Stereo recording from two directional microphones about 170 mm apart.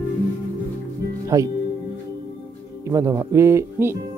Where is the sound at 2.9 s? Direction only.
20° right (ahead or behind).